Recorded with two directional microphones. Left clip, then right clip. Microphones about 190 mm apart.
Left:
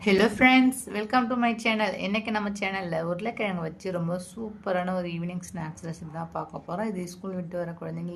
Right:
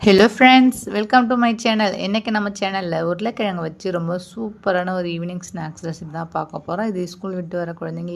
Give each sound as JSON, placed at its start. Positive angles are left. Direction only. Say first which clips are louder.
{"t": 0.0, "sound": "a woman's voice", "louder": "right 9 dB", "side_deg": -30}